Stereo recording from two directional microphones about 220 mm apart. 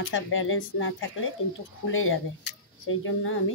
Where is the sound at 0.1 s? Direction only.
65° left (ahead or behind).